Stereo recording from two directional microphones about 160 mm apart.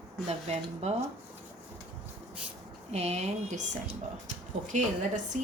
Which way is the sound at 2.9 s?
40° right (ahead or behind).